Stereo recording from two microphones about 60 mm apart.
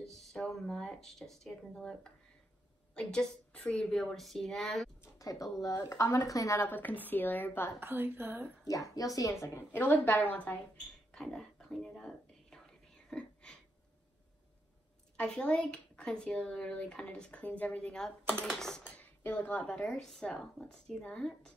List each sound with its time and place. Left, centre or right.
0.1 s speech: centre
4.0 s speech: centre
5.2 s speech: left
5.8 s speech: left
6.1 s speech: left
6.7 s a woman's voice: left
7.8 s a woman's voice: right
8.6 s speech: left
9.4 s a woman's voice: left
11.1 s whispering: centre
15.1 s speech: centre
18.9 s speech: left
19.9 s speech: centre